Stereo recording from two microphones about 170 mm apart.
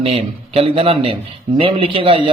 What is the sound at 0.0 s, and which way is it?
A man's voice, 35° right (ahead or behind).